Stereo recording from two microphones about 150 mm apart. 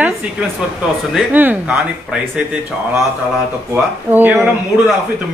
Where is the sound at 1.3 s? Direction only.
10° right (ahead or behind).